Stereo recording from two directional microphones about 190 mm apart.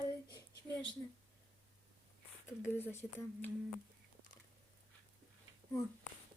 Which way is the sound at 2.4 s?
10° left (ahead or behind).